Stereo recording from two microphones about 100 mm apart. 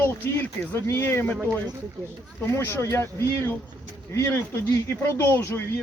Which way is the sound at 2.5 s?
25° left (ahead or behind).